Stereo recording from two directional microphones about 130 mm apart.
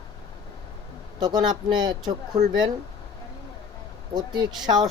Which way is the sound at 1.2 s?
35° right (ahead or behind).